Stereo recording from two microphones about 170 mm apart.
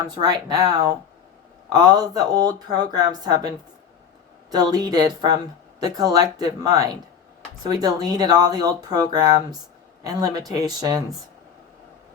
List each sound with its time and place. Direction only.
0.0 s speech: 25° right (ahead or behind)
4.5 s speech: 25° right (ahead or behind)